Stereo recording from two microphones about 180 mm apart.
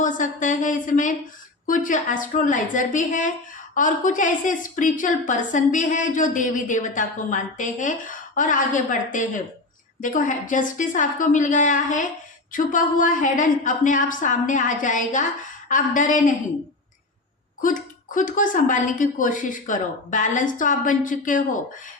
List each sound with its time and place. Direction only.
0.0 s a woman's voice: 45° left (ahead or behind)
17.6 s a woman's voice: 45° left (ahead or behind)